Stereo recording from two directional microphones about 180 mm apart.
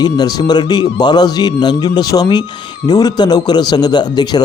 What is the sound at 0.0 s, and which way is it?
A man's voice, 20° left (ahead or behind).